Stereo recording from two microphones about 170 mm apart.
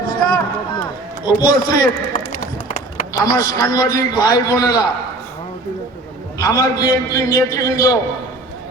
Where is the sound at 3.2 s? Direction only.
20° left (ahead or behind).